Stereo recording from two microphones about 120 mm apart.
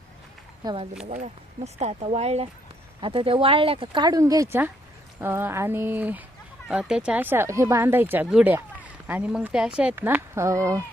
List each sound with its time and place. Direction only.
1.1 s speech: 80° right; by 2.5 s 60° right (ahead or behind)
3.0 s speech: 50° right (ahead or behind)
4.1 s speech: 30° right (ahead or behind)